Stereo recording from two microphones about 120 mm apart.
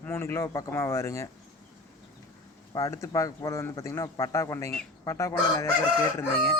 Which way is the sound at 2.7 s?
25° left (ahead or behind).